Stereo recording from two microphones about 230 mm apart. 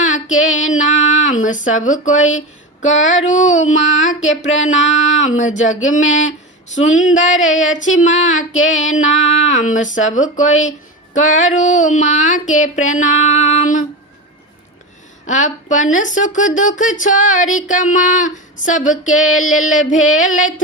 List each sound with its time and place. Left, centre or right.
0.0 s female singing: left
0.6 s speech: left
4.1 s a sound: left
4.4 s speech: left
15.3 s speech: left